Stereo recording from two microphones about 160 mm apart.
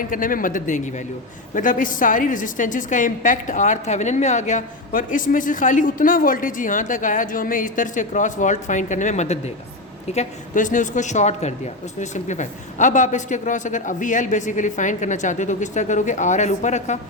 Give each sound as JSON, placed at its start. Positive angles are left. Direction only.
{"t": 0.1, "sound": "a woman's voice", "side_deg": 60}